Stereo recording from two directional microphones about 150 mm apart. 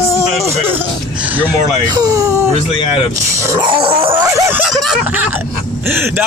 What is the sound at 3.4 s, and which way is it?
Speech, 15° right (ahead or behind).